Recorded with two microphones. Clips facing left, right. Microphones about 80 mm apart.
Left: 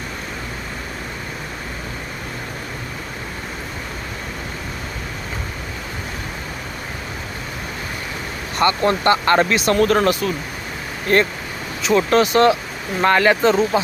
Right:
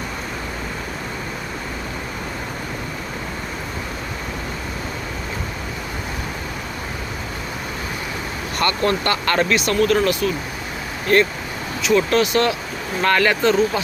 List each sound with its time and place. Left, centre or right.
8.5 s speech: left
9.7 s speech: left
11.8 s speech: left